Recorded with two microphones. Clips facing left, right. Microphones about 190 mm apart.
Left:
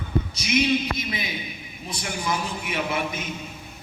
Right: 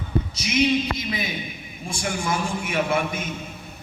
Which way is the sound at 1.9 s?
50° right (ahead or behind).